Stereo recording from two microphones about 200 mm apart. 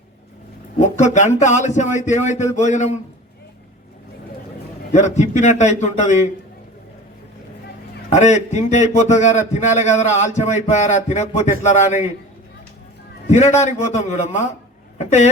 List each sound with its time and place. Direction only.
0.8 s a man's voice: 35° left (ahead or behind)
4.9 s a man's voice: 35° left (ahead or behind)
8.1 s a man's voice: 35° left (ahead or behind)
13.3 s a man's voice: 35° left (ahead or behind)